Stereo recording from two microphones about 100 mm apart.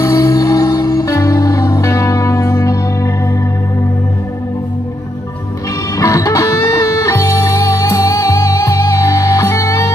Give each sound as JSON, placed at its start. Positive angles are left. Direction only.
{"t": 0.0, "sound": "music", "side_deg": 35}
{"t": 5.9, "sound": "music", "side_deg": 35}